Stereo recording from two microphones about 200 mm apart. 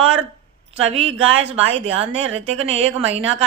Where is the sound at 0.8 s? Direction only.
30° right (ahead or behind).